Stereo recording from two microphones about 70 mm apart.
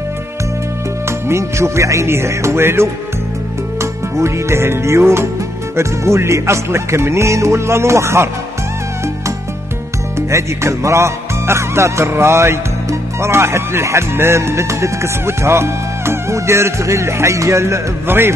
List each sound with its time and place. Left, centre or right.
1.0 s speech: right
4.2 s speech: right
10.3 s speech: right